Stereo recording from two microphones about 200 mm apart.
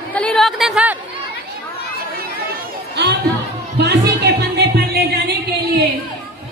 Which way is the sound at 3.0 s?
60° right (ahead or behind).